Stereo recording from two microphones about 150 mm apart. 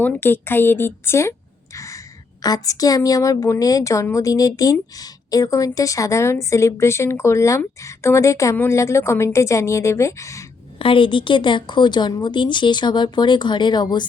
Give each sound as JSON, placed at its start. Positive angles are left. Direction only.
{"t": 0.0, "sound": "speech", "side_deg": 15}
{"t": 1.7, "sound": "a sound", "side_deg": 20}
{"t": 2.4, "sound": "a woman's voice", "side_deg": 25}
{"t": 10.8, "sound": "a woman's voice", "side_deg": 35}